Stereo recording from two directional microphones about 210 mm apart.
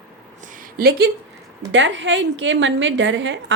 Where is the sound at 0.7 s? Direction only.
45° right (ahead or behind).